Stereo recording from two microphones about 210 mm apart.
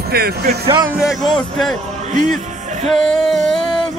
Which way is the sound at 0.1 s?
50° right (ahead or behind).